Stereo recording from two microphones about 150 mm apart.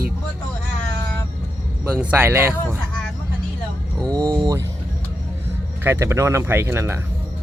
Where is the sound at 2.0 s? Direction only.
10° right (ahead or behind).